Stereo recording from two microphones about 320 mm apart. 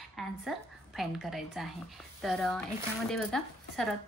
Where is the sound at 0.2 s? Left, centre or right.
Centre.